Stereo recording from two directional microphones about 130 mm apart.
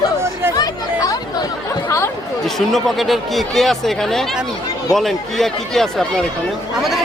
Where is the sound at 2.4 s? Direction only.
Centre (ahead or behind).